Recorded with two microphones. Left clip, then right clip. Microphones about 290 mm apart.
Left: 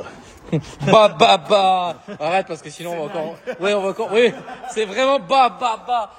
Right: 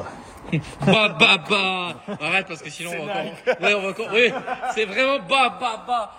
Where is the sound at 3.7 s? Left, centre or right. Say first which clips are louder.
Left 2 dB; centre.